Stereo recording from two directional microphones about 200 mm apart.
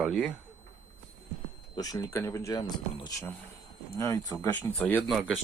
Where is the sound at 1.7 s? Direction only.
20° left (ahead or behind).